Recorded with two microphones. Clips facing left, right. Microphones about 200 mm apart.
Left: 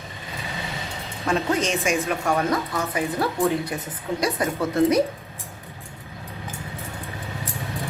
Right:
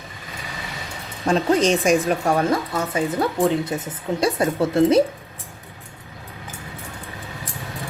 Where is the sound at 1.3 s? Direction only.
35° right (ahead or behind).